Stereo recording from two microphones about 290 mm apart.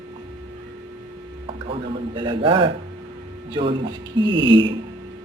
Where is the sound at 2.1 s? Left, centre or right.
Centre.